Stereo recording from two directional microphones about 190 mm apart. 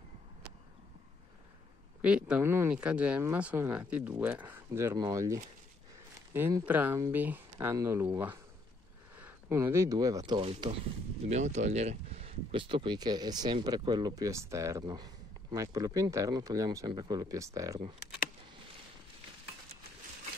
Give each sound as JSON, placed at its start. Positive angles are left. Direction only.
{"t": 2.0, "sound": "speech", "side_deg": -5}